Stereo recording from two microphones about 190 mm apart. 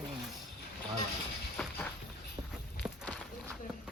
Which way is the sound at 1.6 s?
5° left (ahead or behind).